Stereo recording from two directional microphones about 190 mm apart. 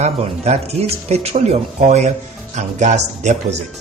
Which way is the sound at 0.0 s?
35° right (ahead or behind).